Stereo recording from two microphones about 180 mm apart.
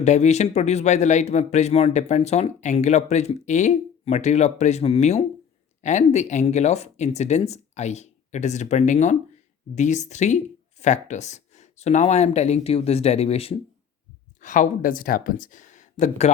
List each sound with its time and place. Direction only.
0.0 s speech: 40° left (ahead or behind)
14.4 s speech: 45° left (ahead or behind)